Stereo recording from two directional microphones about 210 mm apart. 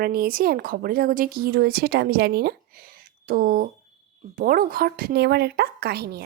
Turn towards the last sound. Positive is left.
turn(degrees=-50)  # may be behind; listen again after turning